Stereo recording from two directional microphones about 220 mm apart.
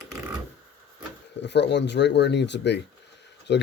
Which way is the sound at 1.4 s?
50° left (ahead or behind).